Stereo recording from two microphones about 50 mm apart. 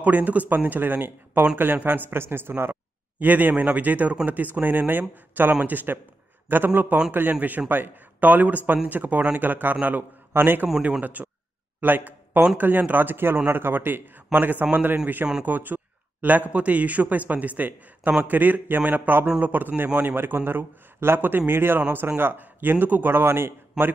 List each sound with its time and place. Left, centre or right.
0.0 s a man's voice: right
23.8 s a man's voice: centre